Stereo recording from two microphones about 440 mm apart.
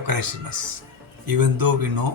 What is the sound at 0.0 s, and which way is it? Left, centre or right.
Speech, right.